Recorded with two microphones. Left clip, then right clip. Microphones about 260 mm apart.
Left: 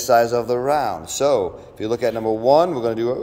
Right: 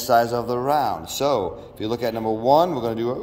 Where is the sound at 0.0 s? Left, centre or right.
Centre.